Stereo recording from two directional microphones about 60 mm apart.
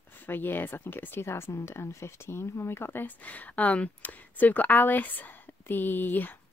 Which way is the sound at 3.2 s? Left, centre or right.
Left.